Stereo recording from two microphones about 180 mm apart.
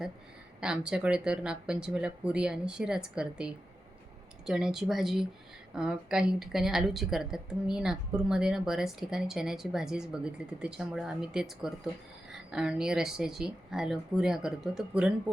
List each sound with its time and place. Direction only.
0.6 s a woman's voice: 5° right (ahead or behind)